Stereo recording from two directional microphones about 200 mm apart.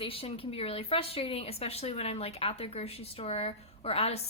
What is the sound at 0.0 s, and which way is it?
Speech, 30° left (ahead or behind).